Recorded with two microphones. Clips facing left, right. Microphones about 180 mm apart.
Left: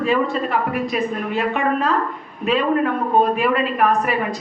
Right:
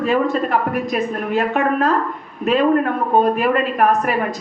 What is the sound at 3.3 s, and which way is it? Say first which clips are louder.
Speech: right 2 dB; 45° right (ahead or behind).